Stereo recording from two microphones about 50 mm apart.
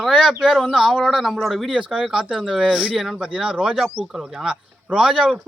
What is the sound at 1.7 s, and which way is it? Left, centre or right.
Speech, right.